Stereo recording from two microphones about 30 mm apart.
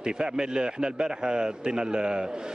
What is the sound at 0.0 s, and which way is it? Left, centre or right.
A man's voice, right.